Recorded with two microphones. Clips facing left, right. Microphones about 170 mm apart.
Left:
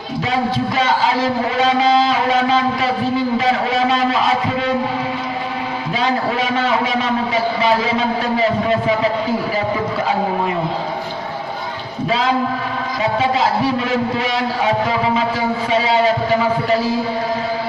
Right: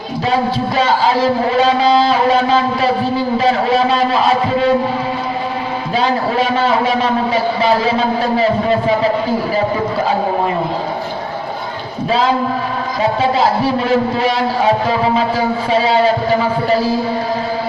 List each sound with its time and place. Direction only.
0.8 s speech: 35° right (ahead or behind)
6.0 s speech: 35° right (ahead or behind)
13.0 s speech: 35° right (ahead or behind)